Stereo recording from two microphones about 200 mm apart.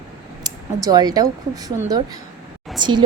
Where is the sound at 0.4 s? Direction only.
20° right (ahead or behind).